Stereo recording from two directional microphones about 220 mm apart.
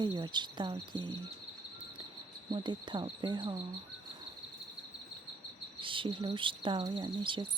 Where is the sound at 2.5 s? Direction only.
20° right (ahead or behind).